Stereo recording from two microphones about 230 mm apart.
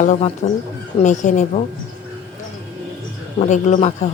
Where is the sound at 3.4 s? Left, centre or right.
Left.